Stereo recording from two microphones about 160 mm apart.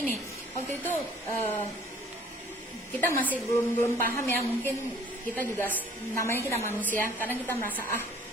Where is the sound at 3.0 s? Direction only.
10° left (ahead or behind).